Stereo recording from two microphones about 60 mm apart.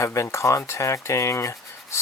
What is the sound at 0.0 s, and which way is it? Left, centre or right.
Speech, left.